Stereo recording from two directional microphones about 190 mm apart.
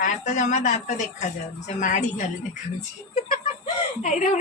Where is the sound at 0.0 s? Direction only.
40° left (ahead or behind).